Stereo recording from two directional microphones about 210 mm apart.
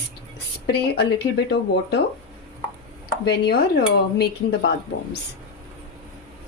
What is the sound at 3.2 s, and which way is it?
Speech, 50° left (ahead or behind).